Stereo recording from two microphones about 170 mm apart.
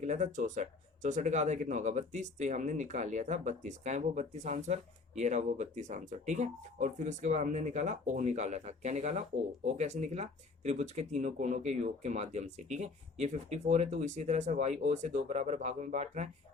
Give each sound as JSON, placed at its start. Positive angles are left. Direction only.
{"t": 0.0, "sound": "speech", "side_deg": -45}